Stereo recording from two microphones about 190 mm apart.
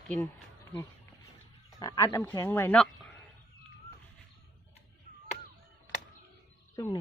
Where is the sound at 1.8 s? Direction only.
15° left (ahead or behind).